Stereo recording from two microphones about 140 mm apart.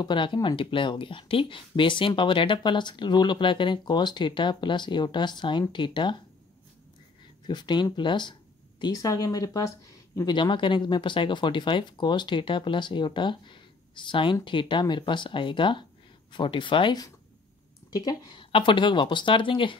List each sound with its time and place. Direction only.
0.0 s speech: 35° left (ahead or behind)
7.4 s speech: 30° left (ahead or behind)